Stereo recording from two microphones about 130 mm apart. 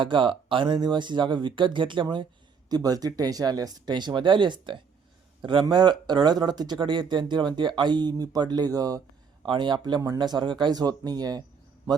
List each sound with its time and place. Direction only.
0.0 s speech: 40° right (ahead or behind)